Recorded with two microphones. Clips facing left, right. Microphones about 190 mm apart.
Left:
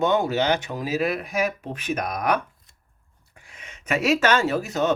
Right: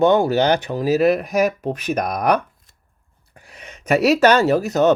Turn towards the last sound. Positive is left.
turn(degrees=-40)  # may be behind; listen again after turning